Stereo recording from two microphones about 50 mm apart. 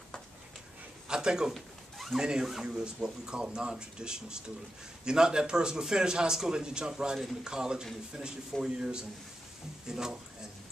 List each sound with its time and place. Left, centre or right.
1.0 s a man's voice: centre
1.5 s a sound: centre
2.1 s speech: centre